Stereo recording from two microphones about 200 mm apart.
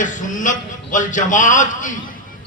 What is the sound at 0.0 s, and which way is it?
A man's voice, 40° left (ahead or behind).